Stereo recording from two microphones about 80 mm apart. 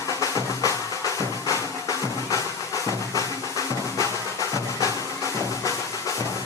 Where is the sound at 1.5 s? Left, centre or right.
Left.